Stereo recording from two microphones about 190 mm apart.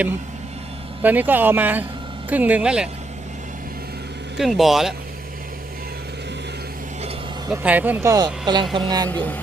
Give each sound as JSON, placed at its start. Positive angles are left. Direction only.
{"t": 1.0, "sound": "speech", "side_deg": -10}
{"t": 4.4, "sound": "speech", "side_deg": 0}
{"t": 7.5, "sound": "speech", "side_deg": -5}